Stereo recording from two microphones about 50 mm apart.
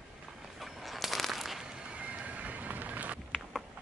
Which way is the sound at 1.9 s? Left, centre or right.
Right.